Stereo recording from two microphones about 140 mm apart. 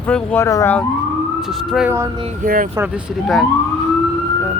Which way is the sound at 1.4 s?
Centre (ahead or behind).